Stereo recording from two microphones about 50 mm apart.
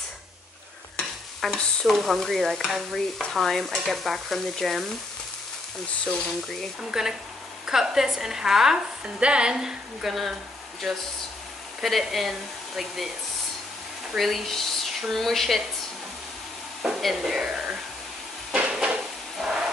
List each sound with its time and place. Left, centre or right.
1.4 s stir: centre
6.8 s a woman's voice: centre
9.0 s a woman's voice: right
10.8 s stir: centre
14.1 s stir: centre
17.0 s a woman's voice: centre
18.5 s a sound: centre